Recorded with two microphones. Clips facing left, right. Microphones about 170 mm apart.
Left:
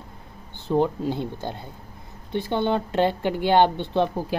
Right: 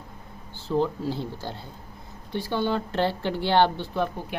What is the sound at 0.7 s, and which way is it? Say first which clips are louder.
Speech: left 3 dB; 20° left (ahead or behind).